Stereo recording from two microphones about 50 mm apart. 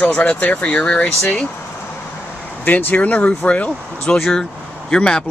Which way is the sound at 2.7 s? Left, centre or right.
Left.